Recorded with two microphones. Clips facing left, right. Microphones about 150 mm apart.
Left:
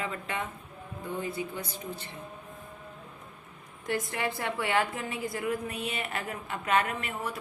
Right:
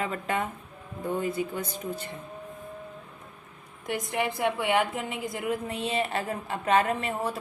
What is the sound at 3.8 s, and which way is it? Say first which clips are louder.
A woman's voice: right 2 dB; 15° right (ahead or behind).